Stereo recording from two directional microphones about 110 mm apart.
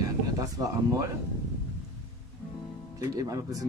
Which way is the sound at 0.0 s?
35° right (ahead or behind).